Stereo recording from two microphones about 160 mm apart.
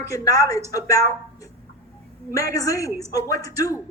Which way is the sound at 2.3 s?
20° left (ahead or behind).